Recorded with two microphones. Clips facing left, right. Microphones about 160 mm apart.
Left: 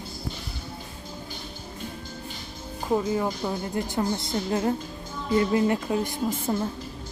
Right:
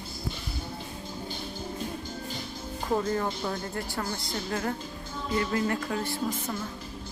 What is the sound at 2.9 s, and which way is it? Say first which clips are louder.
A woman's voice: left 3 dB; 10° left (ahead or behind).